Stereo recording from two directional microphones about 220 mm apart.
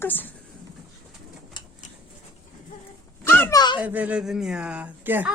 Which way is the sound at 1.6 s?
20° left (ahead or behind).